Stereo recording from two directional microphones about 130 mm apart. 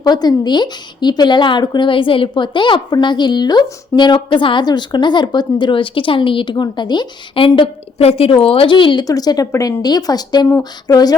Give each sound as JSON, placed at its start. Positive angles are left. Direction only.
{"t": 0.0, "sound": "a woman's voice", "side_deg": 30}